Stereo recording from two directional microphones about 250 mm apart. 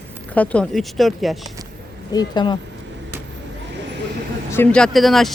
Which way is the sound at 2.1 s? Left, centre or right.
Centre.